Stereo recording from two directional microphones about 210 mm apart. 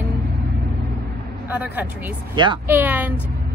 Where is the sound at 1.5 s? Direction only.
10° right (ahead or behind).